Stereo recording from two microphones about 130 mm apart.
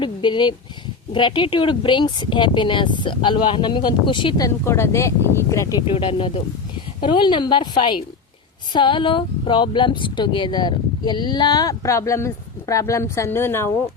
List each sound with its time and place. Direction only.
0.0 s speech: 35° left (ahead or behind)
4.4 s speech: 20° left (ahead or behind)
5.9 s speech: 45° left (ahead or behind); by 13.7 s 20° left (ahead or behind)